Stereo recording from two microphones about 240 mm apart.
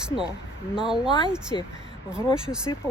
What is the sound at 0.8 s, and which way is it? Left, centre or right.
Speech, centre.